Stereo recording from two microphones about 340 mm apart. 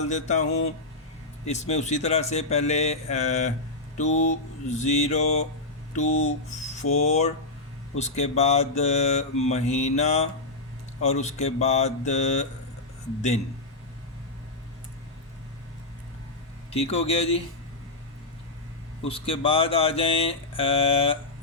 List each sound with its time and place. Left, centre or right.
0.1 s mantra: left
16.7 s speech: centre
19.0 s speech: centre